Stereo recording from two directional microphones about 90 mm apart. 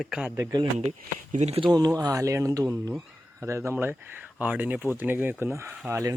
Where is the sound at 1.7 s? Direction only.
45° right (ahead or behind); by 5.3 s 20° right (ahead or behind).